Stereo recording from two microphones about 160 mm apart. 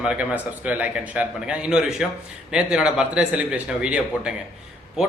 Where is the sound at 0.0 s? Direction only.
5° right (ahead or behind).